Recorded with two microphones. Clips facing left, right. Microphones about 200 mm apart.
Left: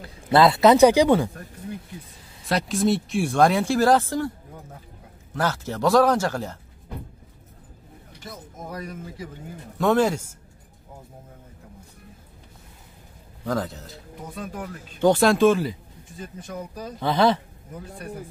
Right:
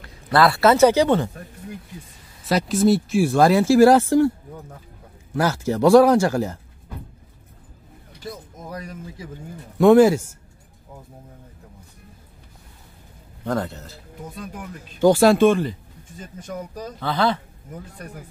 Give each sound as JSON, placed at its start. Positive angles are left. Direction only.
{"t": 0.0, "sound": "speech", "side_deg": 20}
{"t": 2.4, "sound": "speech", "side_deg": 0}
{"t": 5.3, "sound": "speech", "side_deg": -10}
{"t": 9.8, "sound": "speech", "side_deg": -10}
{"t": 13.5, "sound": "speech", "side_deg": 0}
{"t": 15.0, "sound": "speech", "side_deg": -5}
{"t": 17.0, "sound": "speech", "side_deg": 20}